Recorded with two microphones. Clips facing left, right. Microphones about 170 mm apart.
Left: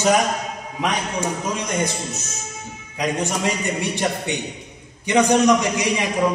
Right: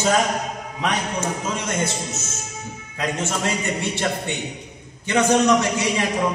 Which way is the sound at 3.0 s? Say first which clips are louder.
Left 2 dB; 15° left (ahead or behind).